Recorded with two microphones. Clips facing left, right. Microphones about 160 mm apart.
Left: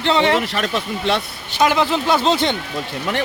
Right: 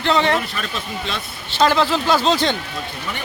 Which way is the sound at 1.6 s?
15° left (ahead or behind).